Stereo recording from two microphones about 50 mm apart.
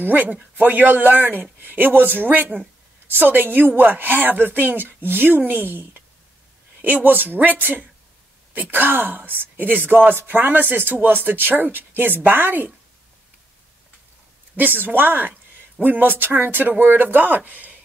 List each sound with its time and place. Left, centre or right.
0.0 s speech: right
14.6 s speech: right